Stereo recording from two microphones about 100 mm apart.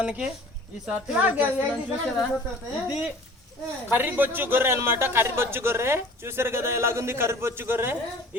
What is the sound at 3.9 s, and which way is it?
A man's voice, 20° right (ahead or behind).